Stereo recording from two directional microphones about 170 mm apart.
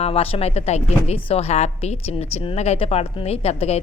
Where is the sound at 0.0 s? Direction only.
35° left (ahead or behind).